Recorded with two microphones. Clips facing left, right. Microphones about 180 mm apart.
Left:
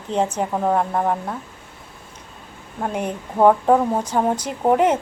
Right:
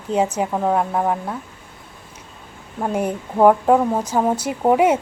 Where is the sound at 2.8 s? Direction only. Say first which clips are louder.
Right 3 dB; 5° right (ahead or behind).